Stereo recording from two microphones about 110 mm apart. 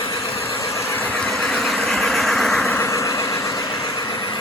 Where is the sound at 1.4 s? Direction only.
Centre (ahead or behind).